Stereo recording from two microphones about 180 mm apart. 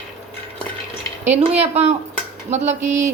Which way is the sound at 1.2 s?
35° right (ahead or behind).